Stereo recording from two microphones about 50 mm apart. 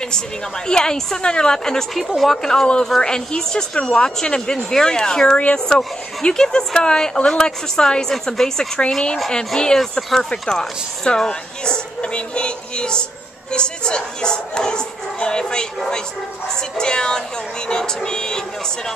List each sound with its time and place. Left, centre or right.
0.7 s a woman's voice: centre
2.0 s a woman's voice: centre